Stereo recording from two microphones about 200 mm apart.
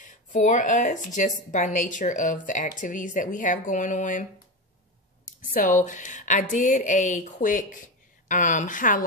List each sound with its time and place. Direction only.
0.0 s a woman's voice: 40° left (ahead or behind)
5.5 s a woman's voice: 40° left (ahead or behind)